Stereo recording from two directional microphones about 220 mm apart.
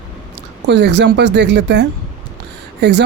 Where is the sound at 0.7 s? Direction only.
50° right (ahead or behind).